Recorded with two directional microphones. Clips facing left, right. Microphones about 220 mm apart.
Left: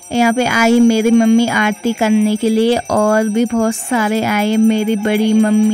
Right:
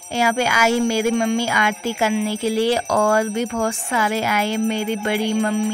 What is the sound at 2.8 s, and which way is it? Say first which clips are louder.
A child's voice: left 5 dB; 45° left (ahead or behind).